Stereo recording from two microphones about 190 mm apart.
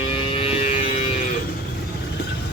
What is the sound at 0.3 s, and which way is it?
Music, 30° left (ahead or behind).